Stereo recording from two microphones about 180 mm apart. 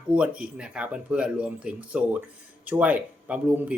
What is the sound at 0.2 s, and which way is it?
Speech, 5° right (ahead or behind).